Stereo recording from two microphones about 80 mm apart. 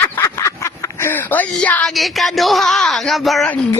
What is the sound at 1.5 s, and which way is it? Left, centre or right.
Speech, centre.